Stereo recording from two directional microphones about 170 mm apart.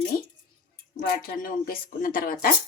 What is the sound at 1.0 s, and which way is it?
Speech, 60° left (ahead or behind).